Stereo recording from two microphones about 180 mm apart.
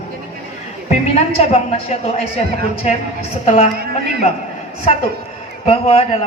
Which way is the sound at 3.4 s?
40° left (ahead or behind).